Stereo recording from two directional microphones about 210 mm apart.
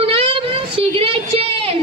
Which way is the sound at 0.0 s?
25° right (ahead or behind).